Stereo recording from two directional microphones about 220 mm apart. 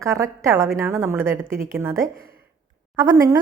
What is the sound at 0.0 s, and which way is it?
A woman's voice, 15° right (ahead or behind).